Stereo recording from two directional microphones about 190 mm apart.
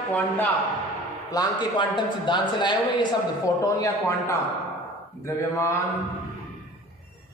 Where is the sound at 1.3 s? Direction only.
20° left (ahead or behind).